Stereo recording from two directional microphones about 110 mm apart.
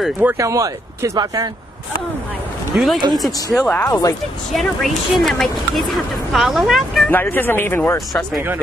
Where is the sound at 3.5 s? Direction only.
15° left (ahead or behind).